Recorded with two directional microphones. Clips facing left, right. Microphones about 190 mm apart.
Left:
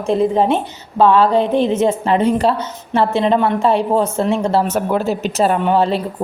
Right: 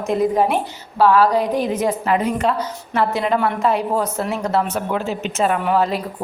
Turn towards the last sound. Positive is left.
turn(degrees=30)  # may be behind; listen again after turning